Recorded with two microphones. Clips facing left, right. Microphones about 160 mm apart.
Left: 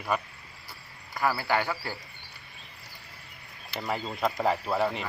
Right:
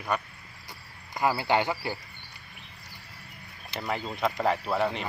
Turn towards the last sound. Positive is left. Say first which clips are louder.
# even
turn(degrees=0)  # may be behind; listen again after turning